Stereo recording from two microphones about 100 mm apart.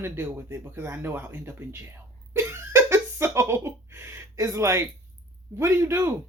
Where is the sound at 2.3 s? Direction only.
25° right (ahead or behind).